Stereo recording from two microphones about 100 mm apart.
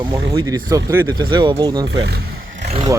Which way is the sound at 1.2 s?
50° right (ahead or behind).